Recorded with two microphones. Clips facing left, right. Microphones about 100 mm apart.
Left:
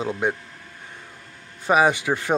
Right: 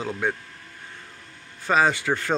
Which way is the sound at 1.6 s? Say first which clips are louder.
Left 2 dB; 15° left (ahead or behind).